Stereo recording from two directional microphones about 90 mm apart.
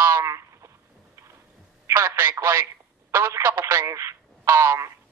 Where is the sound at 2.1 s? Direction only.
25° right (ahead or behind).